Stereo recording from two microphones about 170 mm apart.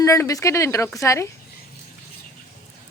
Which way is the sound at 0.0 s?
20° left (ahead or behind).